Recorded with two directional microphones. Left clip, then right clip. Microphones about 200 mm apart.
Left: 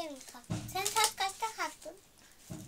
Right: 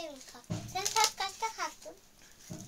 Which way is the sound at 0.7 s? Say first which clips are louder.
Right 1 dB; 20° left (ahead or behind).